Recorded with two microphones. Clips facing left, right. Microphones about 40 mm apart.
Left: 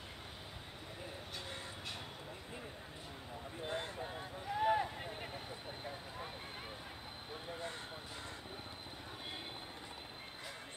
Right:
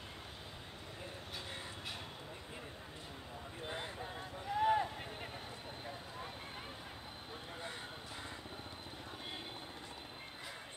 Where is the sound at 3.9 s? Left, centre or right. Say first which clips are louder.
Left 1 dB; centre.